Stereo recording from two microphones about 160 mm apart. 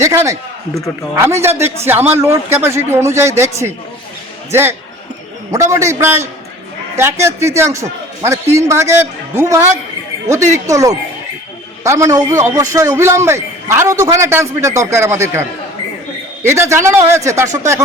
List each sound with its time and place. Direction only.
0.0 s speech: 20° right (ahead or behind)
1.4 s a man's voice: 15° right (ahead or behind)
5.5 s a man's voice: 20° right (ahead or behind)